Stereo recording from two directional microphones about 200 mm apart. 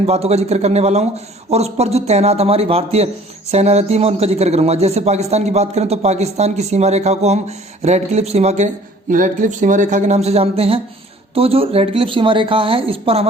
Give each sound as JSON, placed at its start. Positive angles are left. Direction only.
{"t": 0.0, "sound": "a man's voice", "side_deg": -30}